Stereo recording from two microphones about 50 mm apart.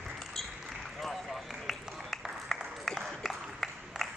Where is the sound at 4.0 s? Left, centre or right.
Centre.